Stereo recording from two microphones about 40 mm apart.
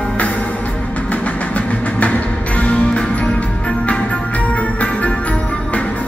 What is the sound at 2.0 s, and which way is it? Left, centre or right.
Music, left.